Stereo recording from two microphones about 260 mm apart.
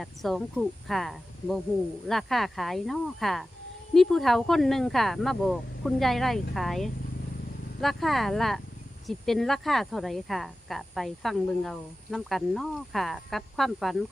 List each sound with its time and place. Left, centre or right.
0.0 s speech: centre